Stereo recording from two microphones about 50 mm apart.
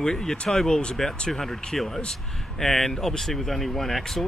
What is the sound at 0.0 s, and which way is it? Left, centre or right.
Speech, centre.